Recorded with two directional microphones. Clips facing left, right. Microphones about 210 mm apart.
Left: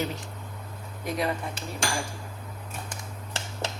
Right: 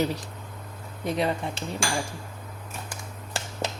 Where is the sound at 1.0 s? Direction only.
30° right (ahead or behind).